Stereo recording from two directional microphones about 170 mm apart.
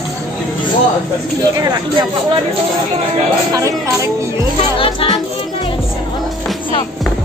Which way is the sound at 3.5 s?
20° right (ahead or behind).